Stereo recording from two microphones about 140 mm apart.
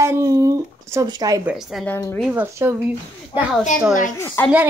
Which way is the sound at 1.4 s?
Centre (ahead or behind).